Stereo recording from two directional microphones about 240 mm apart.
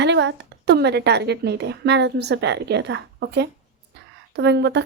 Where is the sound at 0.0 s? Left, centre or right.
Right.